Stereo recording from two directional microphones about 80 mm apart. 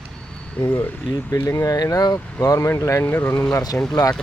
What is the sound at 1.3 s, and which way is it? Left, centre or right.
Speech, left.